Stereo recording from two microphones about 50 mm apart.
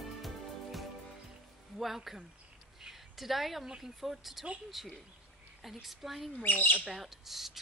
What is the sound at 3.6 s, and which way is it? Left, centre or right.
Speech, centre.